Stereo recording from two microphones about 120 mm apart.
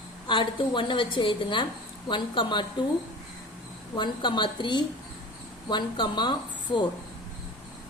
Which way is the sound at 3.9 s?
40° left (ahead or behind).